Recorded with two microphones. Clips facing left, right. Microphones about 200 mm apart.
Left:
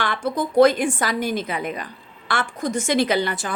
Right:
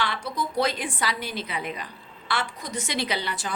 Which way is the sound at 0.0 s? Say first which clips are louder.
Left 5 dB; 50° left (ahead or behind).